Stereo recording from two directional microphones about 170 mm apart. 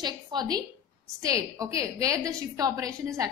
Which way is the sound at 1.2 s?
20° right (ahead or behind).